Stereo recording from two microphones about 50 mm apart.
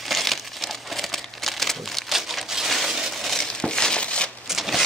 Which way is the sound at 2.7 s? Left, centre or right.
Centre.